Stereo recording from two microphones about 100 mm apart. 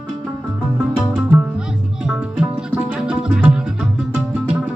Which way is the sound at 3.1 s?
10° right (ahead or behind).